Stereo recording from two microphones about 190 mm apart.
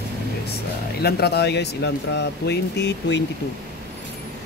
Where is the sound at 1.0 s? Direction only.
60° left (ahead or behind).